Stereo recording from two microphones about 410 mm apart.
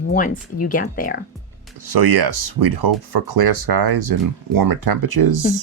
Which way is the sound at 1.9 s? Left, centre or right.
Right.